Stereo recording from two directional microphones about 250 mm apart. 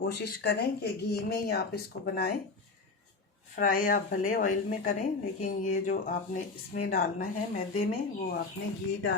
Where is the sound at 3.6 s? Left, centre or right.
Left.